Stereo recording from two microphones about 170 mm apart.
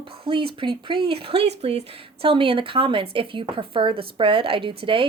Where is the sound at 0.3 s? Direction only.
30° right (ahead or behind).